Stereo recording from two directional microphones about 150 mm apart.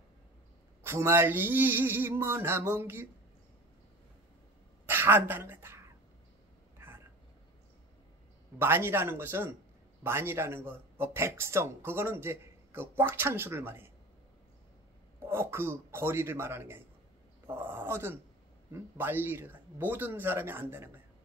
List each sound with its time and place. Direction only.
0.8 s speech: 15° right (ahead or behind)
4.8 s a woman's voice: 15° right (ahead or behind)
6.8 s a sound: 15° right (ahead or behind)
8.5 s speech: 15° right (ahead or behind)
15.1 s speech: 15° right (ahead or behind)